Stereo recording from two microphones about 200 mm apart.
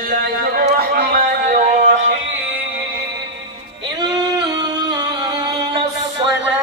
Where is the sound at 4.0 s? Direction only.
20° right (ahead or behind).